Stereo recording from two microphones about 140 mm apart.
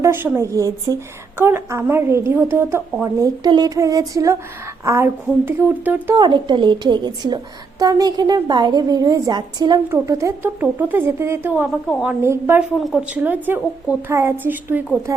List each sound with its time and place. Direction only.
0.0 s a woman's voice: 15° right (ahead or behind)
6.1 s a woman's voice: 35° right (ahead or behind); by 11.7 s 10° right (ahead or behind)
11.9 s a woman's voice: centre (ahead or behind)
12.2 s a woman's voice: 15° right (ahead or behind)
12.8 s a woman's voice: 5° right (ahead or behind)